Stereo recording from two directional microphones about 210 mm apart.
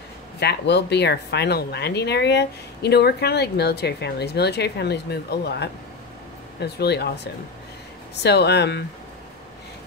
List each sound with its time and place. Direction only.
0.4 s a woman's voice: 50° left (ahead or behind)
8.2 s a woman's voice: 50° left (ahead or behind)